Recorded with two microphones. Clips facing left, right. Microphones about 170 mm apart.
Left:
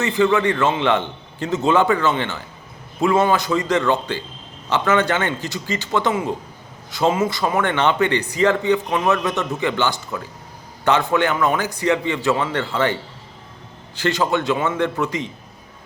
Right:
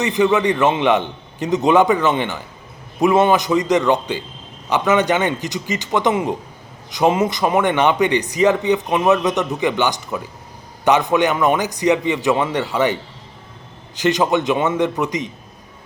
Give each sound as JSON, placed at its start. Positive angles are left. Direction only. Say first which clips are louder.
{"t": 0.0, "sound": "a man's voice", "louder": "right 1 dB", "side_deg": -20}